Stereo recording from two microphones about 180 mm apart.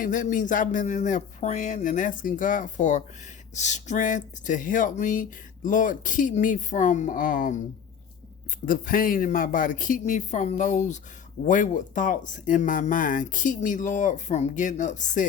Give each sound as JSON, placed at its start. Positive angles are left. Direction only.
{"t": 0.0, "sound": "speech", "side_deg": 45}
{"t": 8.6, "sound": "speech", "side_deg": 50}